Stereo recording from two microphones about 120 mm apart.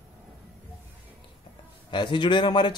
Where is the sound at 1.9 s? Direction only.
40° left (ahead or behind).